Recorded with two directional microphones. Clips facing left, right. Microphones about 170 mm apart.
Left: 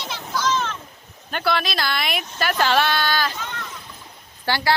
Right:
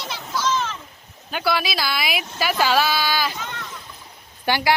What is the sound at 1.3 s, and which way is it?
Speech, 5° right (ahead or behind).